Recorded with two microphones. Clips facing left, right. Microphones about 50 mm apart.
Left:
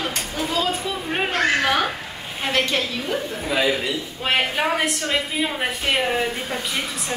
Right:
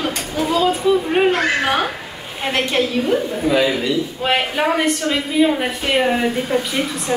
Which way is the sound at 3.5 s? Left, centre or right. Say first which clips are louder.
Right 4 dB; centre.